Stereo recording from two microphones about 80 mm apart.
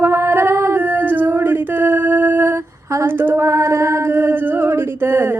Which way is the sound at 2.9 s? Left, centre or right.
Right.